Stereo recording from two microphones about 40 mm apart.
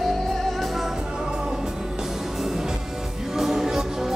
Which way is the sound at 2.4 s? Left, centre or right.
Centre.